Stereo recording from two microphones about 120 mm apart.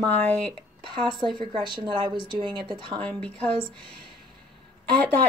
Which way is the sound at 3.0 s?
10° left (ahead or behind).